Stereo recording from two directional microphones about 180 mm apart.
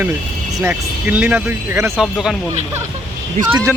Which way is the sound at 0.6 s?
10° right (ahead or behind).